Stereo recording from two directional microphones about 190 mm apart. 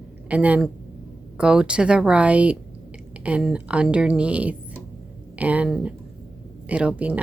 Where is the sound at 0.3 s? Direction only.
5° right (ahead or behind).